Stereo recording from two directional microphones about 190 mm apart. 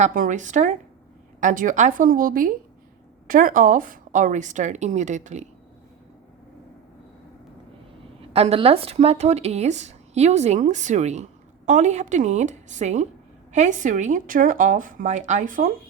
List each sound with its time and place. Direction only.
0.0 s speech: 45° right (ahead or behind)
8.3 s speech: 30° right (ahead or behind)